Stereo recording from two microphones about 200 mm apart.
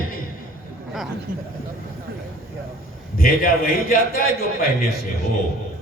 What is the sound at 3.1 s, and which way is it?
A man's voice, 45° left (ahead or behind).